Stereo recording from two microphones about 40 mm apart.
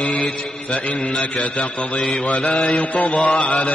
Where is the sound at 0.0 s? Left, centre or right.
Left.